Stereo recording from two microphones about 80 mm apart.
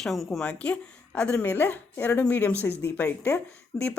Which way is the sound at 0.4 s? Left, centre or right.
Centre.